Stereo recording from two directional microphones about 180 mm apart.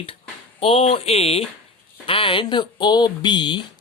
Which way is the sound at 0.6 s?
30° left (ahead or behind).